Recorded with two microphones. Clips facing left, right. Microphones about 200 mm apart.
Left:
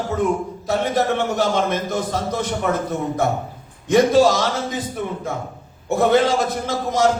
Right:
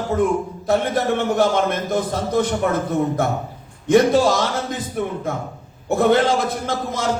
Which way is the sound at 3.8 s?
55° right (ahead or behind).